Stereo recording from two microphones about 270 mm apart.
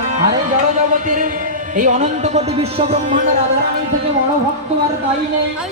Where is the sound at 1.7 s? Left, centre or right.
Right.